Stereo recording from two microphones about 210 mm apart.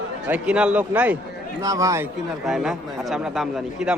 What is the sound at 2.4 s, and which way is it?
A man's voice, centre (ahead or behind).